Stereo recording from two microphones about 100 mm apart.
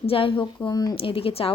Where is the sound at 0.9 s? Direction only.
65° left (ahead or behind).